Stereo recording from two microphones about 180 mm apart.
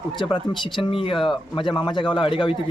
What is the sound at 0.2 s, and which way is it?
Speech, 25° left (ahead or behind).